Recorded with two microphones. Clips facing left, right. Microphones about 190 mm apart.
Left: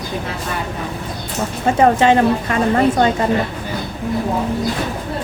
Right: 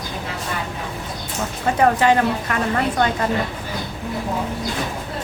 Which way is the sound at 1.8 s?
25° left (ahead or behind).